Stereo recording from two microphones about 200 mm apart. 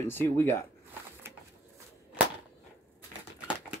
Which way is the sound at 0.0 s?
10° left (ahead or behind).